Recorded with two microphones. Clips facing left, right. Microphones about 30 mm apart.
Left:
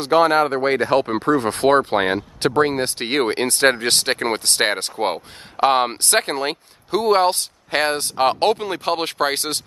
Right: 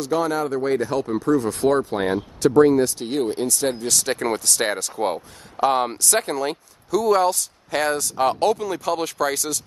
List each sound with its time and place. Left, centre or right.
0.0 s speech: left